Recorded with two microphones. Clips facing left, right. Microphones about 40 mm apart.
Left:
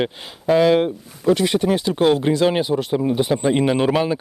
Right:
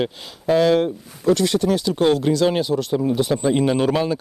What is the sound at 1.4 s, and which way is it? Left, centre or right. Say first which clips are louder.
Speech: left 1 dB; left.